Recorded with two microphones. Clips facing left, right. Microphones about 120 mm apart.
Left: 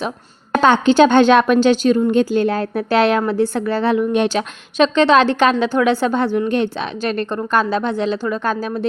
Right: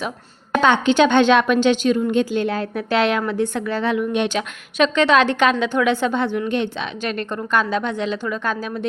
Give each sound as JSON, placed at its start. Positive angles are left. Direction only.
{"t": 0.5, "sound": "a woman's voice", "side_deg": 40}